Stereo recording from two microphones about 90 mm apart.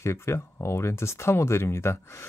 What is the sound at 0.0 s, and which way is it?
Speech, 30° left (ahead or behind).